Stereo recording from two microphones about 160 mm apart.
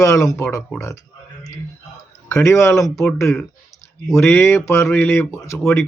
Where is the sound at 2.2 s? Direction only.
15° left (ahead or behind).